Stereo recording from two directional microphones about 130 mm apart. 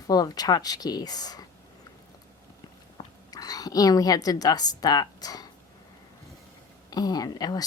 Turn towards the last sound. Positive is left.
turn(degrees=30)  # may be behind; listen again after turning